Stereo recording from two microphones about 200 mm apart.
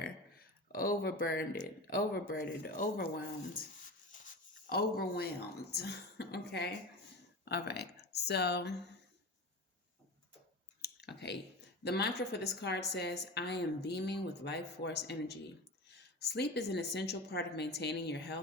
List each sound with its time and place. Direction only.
0.0 s a sound: 50° left (ahead or behind)
1.9 s speech: 45° left (ahead or behind)
4.1 s a sound: 40° left (ahead or behind)
5.7 s a woman's voice: 55° left (ahead or behind)
10.8 s clicking: 55° left (ahead or behind)
11.8 s a woman's voice: 55° left (ahead or behind)